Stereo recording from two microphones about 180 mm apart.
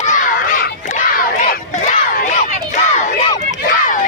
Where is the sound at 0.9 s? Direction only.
50° left (ahead or behind).